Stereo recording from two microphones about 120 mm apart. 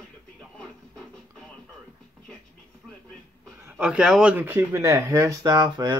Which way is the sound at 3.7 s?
10° right (ahead or behind).